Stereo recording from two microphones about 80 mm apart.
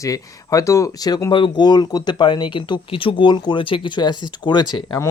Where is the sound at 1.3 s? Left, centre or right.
Left.